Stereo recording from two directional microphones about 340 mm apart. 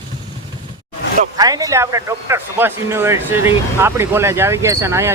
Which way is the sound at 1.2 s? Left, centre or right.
Centre.